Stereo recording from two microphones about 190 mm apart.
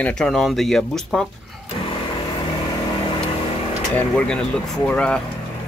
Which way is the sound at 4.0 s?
5° left (ahead or behind).